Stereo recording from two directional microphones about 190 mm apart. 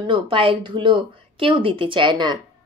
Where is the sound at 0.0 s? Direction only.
25° right (ahead or behind).